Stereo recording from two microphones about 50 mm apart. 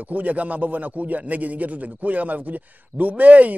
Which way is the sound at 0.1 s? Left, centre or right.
Right.